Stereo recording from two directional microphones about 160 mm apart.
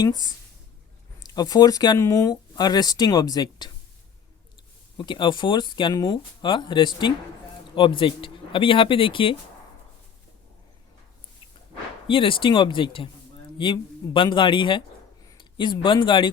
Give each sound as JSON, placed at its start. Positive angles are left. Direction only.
{"t": 0.0, "sound": "speech", "side_deg": 25}
{"t": 4.9, "sound": "speech", "side_deg": 30}
{"t": 12.0, "sound": "speech", "side_deg": 30}